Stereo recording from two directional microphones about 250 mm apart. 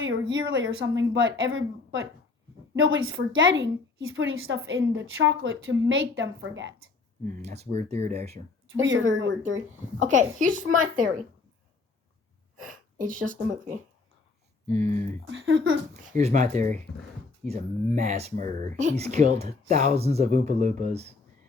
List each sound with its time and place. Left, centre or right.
0.0 s a woman's voice: right
7.4 s speech: right
8.7 s a woman's voice: right
9.6 s speech: right
12.6 s speech: right
15.3 s a woman's voice: right
16.0 s speech: right